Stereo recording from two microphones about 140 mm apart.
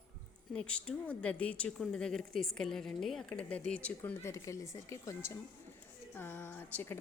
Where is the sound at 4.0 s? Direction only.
20° left (ahead or behind).